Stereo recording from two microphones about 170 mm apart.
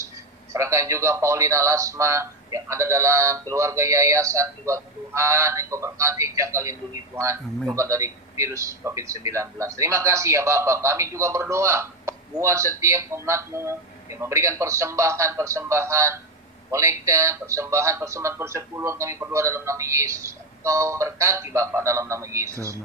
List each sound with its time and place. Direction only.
0.5 s a man's voice: 15° right (ahead or behind)